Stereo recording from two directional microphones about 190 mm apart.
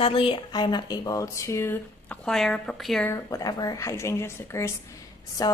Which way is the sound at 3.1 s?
15° left (ahead or behind).